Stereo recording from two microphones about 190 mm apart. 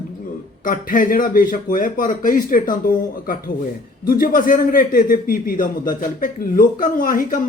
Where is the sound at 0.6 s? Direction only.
45° left (ahead or behind).